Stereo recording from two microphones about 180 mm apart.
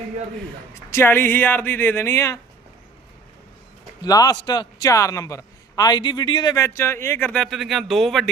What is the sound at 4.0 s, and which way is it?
A man's voice, 20° left (ahead or behind).